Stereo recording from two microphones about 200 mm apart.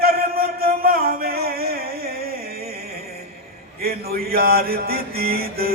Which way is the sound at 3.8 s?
50° right (ahead or behind).